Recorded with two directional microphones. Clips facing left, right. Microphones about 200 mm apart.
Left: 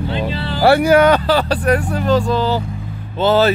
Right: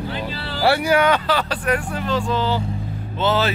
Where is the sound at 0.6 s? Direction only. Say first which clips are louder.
Left 6 dB; 45° left (ahead or behind).